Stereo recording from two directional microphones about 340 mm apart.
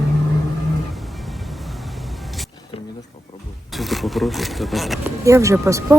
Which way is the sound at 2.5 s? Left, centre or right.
Centre.